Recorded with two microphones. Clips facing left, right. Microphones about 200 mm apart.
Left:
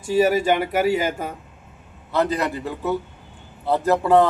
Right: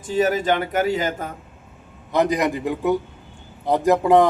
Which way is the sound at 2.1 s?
15° right (ahead or behind).